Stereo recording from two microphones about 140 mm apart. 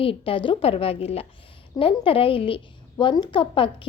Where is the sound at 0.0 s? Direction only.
40° left (ahead or behind).